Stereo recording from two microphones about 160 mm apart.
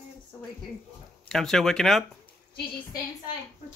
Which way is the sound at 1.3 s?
5° left (ahead or behind).